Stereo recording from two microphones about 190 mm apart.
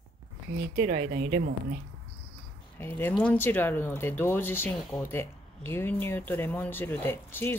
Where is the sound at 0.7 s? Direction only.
50° right (ahead or behind).